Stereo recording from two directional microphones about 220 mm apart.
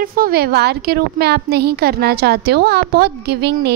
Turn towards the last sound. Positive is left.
turn(degrees=-50)  # may be behind; listen again after turning